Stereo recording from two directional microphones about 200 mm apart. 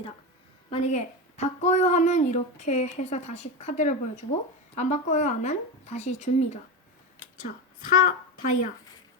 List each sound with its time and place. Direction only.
0.7 s a woman's voice: 35° left (ahead or behind)